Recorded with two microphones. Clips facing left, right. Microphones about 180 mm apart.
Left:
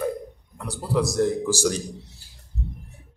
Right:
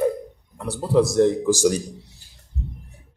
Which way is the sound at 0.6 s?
25° right (ahead or behind).